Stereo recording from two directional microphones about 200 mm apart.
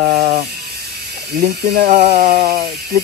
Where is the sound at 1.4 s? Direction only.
50° right (ahead or behind).